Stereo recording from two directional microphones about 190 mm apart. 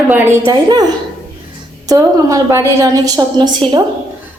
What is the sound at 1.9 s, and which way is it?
A woman's voice, 20° right (ahead or behind).